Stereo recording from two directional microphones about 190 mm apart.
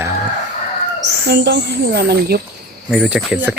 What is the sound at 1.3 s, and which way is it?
Speech, 60° right (ahead or behind).